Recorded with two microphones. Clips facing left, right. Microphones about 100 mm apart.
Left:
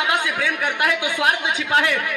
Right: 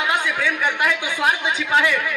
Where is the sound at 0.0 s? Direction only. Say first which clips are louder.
Even; 60° left (ahead or behind).